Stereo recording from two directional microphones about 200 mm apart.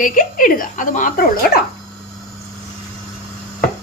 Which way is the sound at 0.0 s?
45° left (ahead or behind).